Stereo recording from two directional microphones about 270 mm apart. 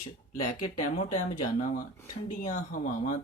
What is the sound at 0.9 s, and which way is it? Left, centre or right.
Speech, left.